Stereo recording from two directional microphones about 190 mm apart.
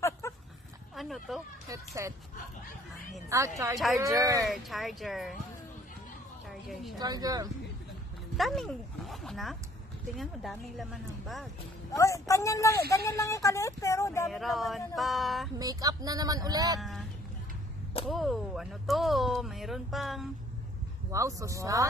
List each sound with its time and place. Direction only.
0.2 s a sound: 15° left (ahead or behind)
0.9 s a sound: centre (ahead or behind)
1.7 s speech: 15° right (ahead or behind)
3.3 s speech: 15° right (ahead or behind)
4.4 s speech: centre (ahead or behind)
6.7 s speech: centre (ahead or behind)
7.0 s speech: 20° right (ahead or behind)
8.4 s speech: centre (ahead or behind)
11.9 s speech: 15° left (ahead or behind)
14.2 s speech: centre (ahead or behind)
15.6 s speech: 20° right (ahead or behind)
18.0 s speech: centre (ahead or behind)
21.1 s speech: 15° right (ahead or behind)